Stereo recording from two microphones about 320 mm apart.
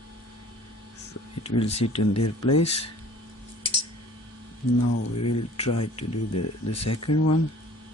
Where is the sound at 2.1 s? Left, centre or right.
Left.